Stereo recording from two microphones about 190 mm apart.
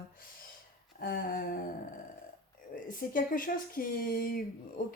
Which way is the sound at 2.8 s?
45° left (ahead or behind).